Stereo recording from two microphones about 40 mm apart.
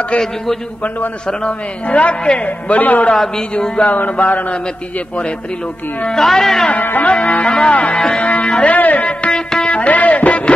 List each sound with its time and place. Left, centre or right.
1.9 s music: left
3.8 s mantra: left
6.1 s speech: centre
6.8 s mantra: left
7.1 s music: left
7.4 s music: left
7.7 s music: left
9.3 s music: left
9.7 s music: left